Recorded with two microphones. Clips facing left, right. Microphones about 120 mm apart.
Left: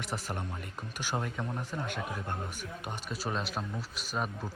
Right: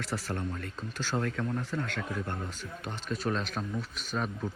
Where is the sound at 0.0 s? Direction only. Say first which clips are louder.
Right 3 dB; 15° left (ahead or behind).